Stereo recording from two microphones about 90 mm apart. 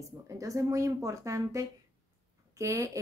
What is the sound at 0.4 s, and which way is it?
Speech, 40° right (ahead or behind).